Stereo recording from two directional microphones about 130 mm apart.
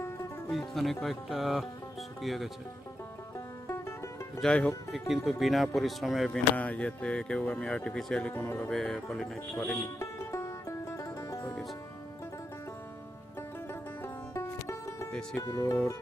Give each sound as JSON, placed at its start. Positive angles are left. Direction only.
{"t": 0.0, "sound": "music", "side_deg": 20}
{"t": 0.7, "sound": "speech", "side_deg": 0}
{"t": 3.3, "sound": "music", "side_deg": 20}
{"t": 4.4, "sound": "speech", "side_deg": 10}
{"t": 8.3, "sound": "speech", "side_deg": 20}
{"t": 8.7, "sound": "speech", "side_deg": 5}
{"t": 9.7, "sound": "music", "side_deg": 20}
{"t": 13.7, "sound": "music", "side_deg": 20}
{"t": 15.4, "sound": "speech", "side_deg": 25}